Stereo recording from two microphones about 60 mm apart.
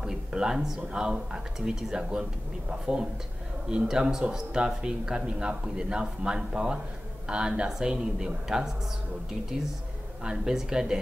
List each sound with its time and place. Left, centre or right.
0.0 s speech: centre
3.7 s speech: centre
10.2 s speech: centre